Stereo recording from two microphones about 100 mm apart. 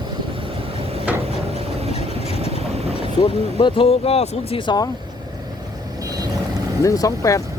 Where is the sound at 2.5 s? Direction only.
90° right.